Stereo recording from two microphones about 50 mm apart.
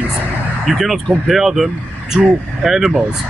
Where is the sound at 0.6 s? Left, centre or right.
Centre.